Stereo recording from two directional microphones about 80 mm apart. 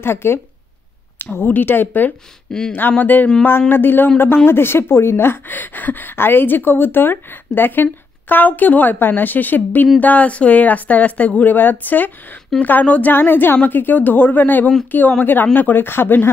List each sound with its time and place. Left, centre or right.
0.0 s a woman's voice: left